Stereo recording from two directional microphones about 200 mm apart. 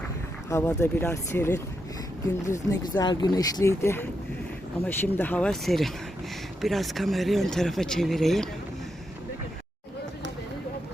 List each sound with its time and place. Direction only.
0.5 s speech: 15° left (ahead or behind)